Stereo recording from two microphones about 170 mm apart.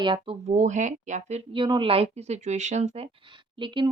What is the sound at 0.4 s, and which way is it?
Speech, 45° right (ahead or behind).